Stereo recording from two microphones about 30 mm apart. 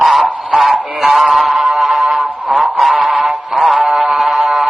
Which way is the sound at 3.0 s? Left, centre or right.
Right.